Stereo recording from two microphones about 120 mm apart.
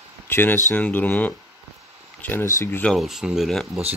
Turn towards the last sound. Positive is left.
turn(degrees=0)  # may be behind; listen again after turning